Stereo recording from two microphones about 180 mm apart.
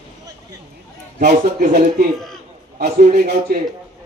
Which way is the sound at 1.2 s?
60° right (ahead or behind).